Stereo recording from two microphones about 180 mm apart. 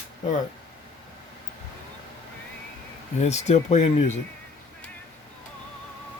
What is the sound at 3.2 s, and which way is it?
Speech, 40° left (ahead or behind).